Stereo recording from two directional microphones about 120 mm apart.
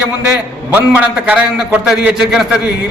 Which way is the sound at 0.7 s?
10° right (ahead or behind).